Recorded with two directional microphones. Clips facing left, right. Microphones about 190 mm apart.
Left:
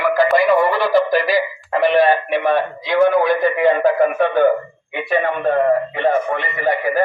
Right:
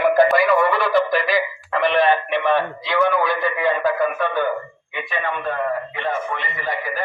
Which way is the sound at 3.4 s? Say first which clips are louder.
Left 6 dB; 15° left (ahead or behind).